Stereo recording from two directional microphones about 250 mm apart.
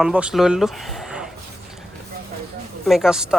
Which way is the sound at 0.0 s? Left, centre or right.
Centre.